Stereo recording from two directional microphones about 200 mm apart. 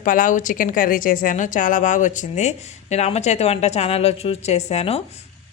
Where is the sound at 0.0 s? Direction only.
40° left (ahead or behind).